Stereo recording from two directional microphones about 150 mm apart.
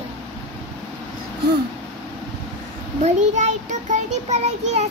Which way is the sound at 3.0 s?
50° right (ahead or behind).